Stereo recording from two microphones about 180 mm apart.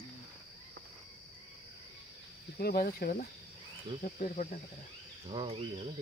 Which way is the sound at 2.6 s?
55° left (ahead or behind).